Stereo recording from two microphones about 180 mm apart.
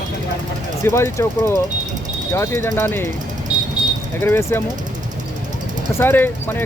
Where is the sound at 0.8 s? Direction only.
15° left (ahead or behind).